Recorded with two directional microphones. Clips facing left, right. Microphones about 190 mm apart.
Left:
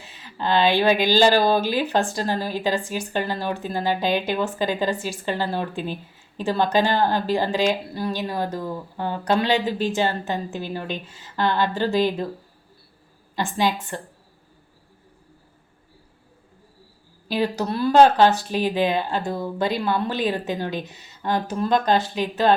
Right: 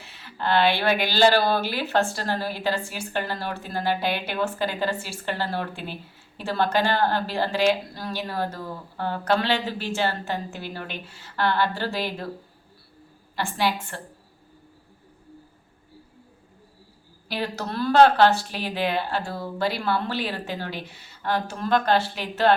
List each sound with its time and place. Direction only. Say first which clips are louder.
0.0 s speech: left 2 dB; 15° left (ahead or behind)
13.3 s speech: left 2 dB; 20° left (ahead or behind)
17.2 s speech: left 6 dB; 15° left (ahead or behind)